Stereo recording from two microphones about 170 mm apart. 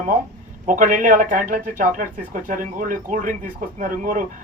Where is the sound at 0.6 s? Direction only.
50° right (ahead or behind).